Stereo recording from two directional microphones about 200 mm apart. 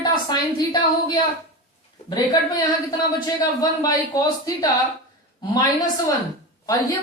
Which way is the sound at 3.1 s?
20° left (ahead or behind).